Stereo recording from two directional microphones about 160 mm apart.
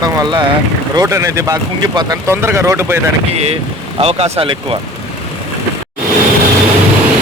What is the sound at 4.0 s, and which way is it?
Speech, 40° right (ahead or behind).